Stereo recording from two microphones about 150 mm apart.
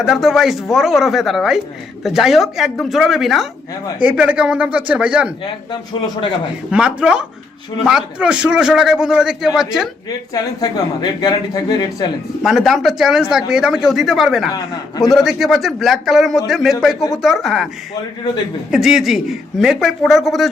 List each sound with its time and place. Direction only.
0.0 s a man's voice: centre (ahead or behind)
6.7 s a man's voice: 5° right (ahead or behind)
10.1 s speech: 25° left (ahead or behind)
12.4 s a man's voice: centre (ahead or behind)
18.7 s a man's voice: centre (ahead or behind)